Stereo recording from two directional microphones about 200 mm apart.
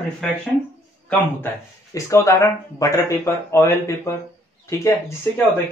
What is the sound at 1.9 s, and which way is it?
Speech, 15° left (ahead or behind).